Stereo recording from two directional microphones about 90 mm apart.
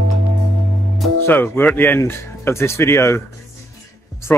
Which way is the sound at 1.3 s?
20° left (ahead or behind).